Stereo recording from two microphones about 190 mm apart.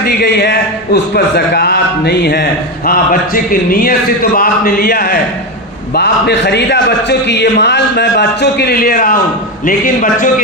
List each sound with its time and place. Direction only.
0.0 s a man's voice: 55° left (ahead or behind)